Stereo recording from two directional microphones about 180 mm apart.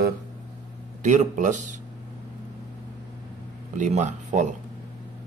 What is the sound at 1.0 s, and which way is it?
Speech, 45° right (ahead or behind).